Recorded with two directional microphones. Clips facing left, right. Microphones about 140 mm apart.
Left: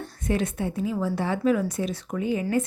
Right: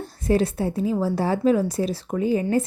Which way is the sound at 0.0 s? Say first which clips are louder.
Right 5 dB; 35° right (ahead or behind).